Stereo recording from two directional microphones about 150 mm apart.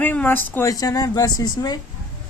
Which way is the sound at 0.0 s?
10° left (ahead or behind).